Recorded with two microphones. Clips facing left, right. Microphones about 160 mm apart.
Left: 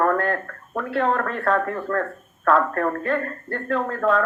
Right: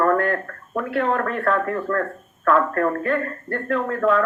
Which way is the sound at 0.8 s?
35° left (ahead or behind).